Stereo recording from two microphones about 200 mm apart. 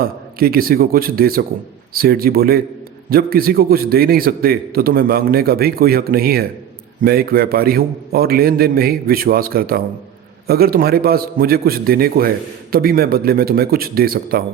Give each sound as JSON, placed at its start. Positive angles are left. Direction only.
{"t": 0.0, "sound": "a man's voice", "side_deg": -50}